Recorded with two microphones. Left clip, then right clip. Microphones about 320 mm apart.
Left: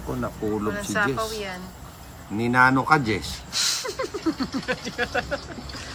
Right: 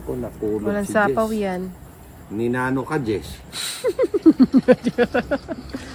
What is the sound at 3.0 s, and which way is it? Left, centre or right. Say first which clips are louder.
Speech: right 2 dB; left.